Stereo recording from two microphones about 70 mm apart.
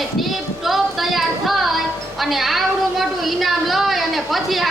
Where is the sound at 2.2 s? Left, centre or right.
Centre.